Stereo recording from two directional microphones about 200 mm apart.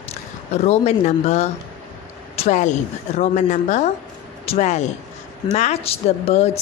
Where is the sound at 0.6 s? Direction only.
35° left (ahead or behind).